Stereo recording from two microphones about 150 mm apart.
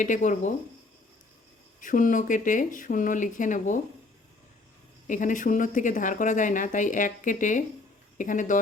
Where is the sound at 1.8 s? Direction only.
60° left (ahead or behind).